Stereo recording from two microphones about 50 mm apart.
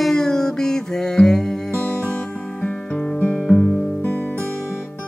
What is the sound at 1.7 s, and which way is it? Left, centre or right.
Music, left.